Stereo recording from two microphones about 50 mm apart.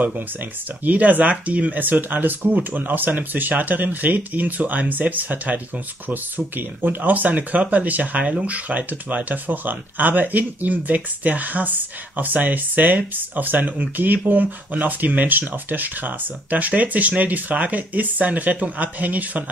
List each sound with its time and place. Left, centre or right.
0.8 s speech: right